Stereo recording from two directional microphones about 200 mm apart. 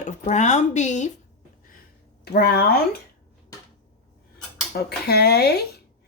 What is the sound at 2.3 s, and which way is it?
Speech, 50° left (ahead or behind).